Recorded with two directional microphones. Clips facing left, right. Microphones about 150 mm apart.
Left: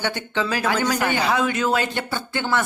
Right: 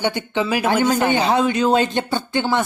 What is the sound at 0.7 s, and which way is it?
Speech, 30° right (ahead or behind).